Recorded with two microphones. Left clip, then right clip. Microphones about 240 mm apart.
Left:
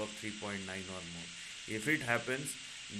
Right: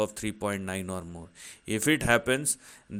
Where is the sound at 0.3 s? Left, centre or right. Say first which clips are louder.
Right 9 dB; right.